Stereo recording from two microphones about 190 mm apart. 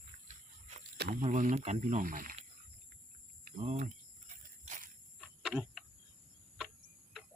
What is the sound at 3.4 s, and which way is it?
Cricket, 35° right (ahead or behind).